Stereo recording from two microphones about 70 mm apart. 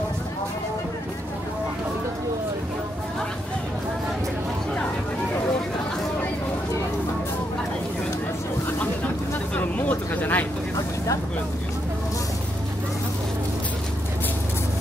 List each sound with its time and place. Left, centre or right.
9.6 s vehicle: left